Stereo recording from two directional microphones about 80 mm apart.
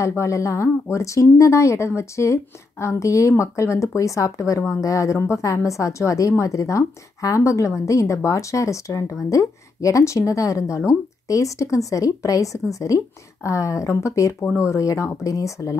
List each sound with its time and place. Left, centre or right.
0.0 s speech: left